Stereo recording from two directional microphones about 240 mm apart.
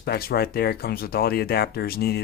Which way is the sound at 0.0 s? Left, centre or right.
Left.